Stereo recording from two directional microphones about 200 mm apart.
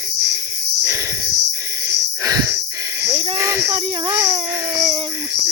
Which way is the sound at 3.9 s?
20° right (ahead or behind).